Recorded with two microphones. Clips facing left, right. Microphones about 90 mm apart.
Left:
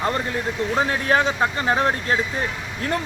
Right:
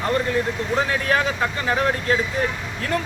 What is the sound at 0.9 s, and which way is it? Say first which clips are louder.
Speech: left 1 dB; 30° left (ahead or behind).